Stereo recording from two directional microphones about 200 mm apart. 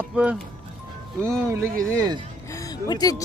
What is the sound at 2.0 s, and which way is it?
Speech, 20° right (ahead or behind).